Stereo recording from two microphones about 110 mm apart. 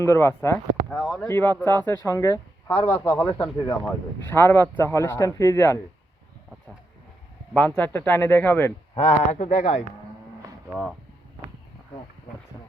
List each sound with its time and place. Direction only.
0.0 s speech: 25° left (ahead or behind)
0.9 s speech: centre (ahead or behind)
1.3 s speech: 20° left (ahead or behind)
2.6 s speech: 15° left (ahead or behind)
3.3 s speech: 45° left (ahead or behind)
3.8 s speech: 20° left (ahead or behind)
7.8 s speech: 15° left (ahead or behind)
9.0 s speech: 90° left
10.7 s speech: centre (ahead or behind)